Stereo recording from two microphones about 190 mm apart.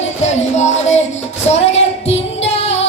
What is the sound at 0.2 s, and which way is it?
Music, 35° left (ahead or behind).